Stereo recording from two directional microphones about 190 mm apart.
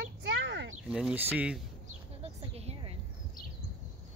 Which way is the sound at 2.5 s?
35° right (ahead or behind).